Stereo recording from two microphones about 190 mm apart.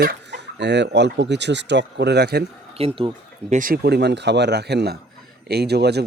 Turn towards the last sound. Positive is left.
turn(degrees=-60)  # may be behind; listen again after turning